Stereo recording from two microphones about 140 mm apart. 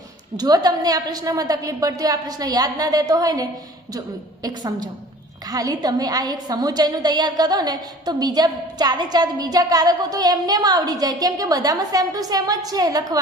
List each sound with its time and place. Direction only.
0.3 s a woman's voice: 30° right (ahead or behind)
4.4 s a woman's voice: 30° right (ahead or behind)